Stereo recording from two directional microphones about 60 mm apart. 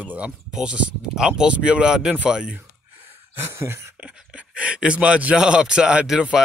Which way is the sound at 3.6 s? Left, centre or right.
Right.